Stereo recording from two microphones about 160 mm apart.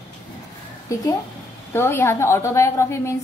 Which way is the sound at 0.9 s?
20° left (ahead or behind).